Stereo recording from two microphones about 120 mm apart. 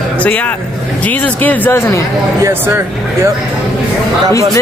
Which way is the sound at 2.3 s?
20° right (ahead or behind).